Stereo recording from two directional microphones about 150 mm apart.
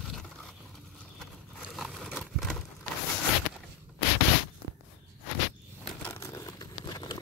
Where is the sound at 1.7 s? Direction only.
Centre (ahead or behind).